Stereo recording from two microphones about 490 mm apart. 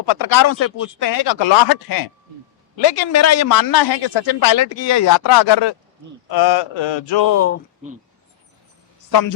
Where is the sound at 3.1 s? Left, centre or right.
Left.